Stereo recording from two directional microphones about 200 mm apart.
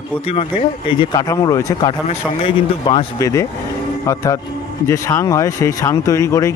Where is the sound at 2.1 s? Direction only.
25° left (ahead or behind).